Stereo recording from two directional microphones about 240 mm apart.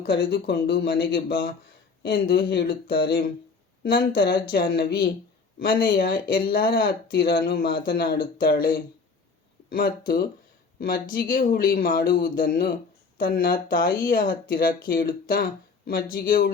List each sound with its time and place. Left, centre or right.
0.0 s speech: left